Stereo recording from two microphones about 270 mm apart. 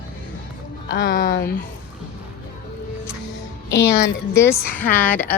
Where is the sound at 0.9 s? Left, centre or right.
Left.